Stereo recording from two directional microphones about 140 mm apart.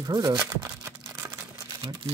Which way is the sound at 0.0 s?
30° right (ahead or behind).